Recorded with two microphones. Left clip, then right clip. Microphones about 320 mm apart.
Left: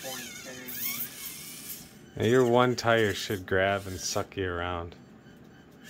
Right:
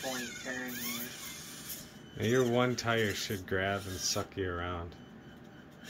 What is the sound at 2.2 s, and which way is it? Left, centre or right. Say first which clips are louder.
Speech: left 7 dB; centre.